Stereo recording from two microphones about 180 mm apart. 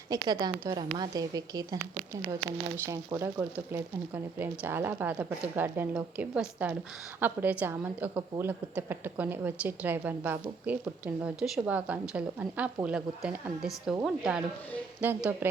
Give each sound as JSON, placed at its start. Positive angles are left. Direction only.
{"t": 0.1, "sound": "a woman's voice", "side_deg": -20}
{"t": 2.8, "sound": "a woman's voice", "side_deg": -15}